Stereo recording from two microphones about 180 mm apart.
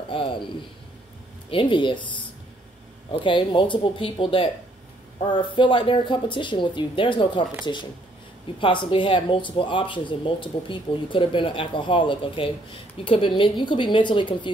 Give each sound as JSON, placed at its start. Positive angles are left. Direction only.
{"t": 0.1, "sound": "a man's voice", "side_deg": 30}
{"t": 1.5, "sound": "speech", "side_deg": 30}
{"t": 3.1, "sound": "speech", "side_deg": 25}